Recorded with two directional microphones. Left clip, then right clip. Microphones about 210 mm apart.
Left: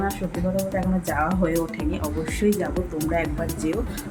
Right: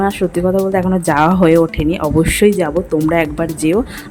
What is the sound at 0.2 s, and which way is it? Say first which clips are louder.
Speech: right 14 dB; 35° right (ahead or behind).